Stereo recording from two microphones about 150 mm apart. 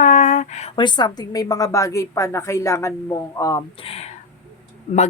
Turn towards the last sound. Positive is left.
turn(degrees=45)  # may be behind; listen again after turning